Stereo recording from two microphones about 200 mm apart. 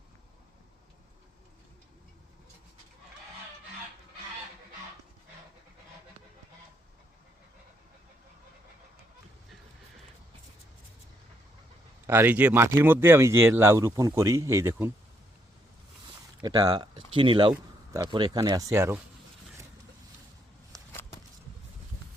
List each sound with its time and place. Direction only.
12.0 s speech: 10° right (ahead or behind)
16.4 s speech: 20° right (ahead or behind)
20.9 s vehicle: 10° left (ahead or behind)